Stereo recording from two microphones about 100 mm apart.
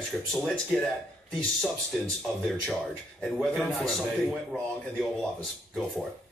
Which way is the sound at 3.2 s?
5° left (ahead or behind).